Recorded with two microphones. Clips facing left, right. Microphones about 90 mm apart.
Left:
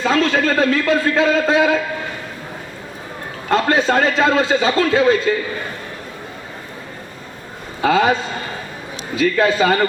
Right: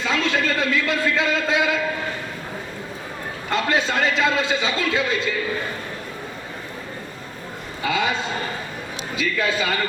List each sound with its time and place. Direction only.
0.0 s a man's voice: 40° left (ahead or behind)
3.5 s a man's voice: 40° left (ahead or behind)
7.8 s a man's voice: 40° left (ahead or behind)